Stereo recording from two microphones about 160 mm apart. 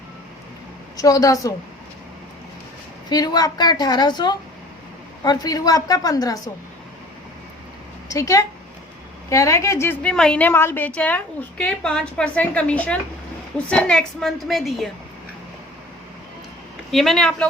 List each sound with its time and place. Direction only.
0.9 s a woman's voice: 20° left (ahead or behind)
3.1 s a woman's voice: 25° left (ahead or behind)
8.0 s a woman's voice: 20° left (ahead or behind); by 14.8 s centre (ahead or behind)
16.9 s a woman's voice: centre (ahead or behind)